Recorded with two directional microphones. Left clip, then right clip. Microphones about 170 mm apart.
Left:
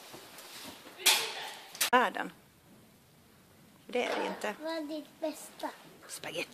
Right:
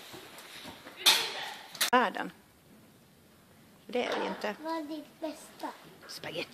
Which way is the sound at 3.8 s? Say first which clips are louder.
Even; 5° left (ahead or behind).